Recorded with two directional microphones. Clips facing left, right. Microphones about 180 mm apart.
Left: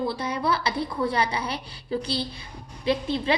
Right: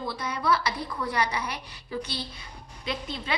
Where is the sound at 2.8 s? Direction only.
30° left (ahead or behind).